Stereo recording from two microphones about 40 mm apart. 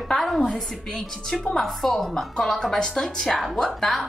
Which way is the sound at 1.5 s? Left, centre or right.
Centre.